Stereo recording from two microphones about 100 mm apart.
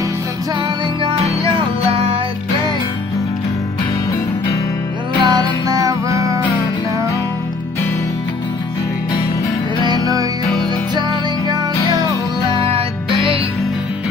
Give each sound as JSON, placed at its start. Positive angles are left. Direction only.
{"t": 1.6, "sound": "music", "side_deg": -80}
{"t": 5.2, "sound": "music", "side_deg": -45}
{"t": 9.8, "sound": "music", "side_deg": -40}
{"t": 12.4, "sound": "music", "side_deg": -65}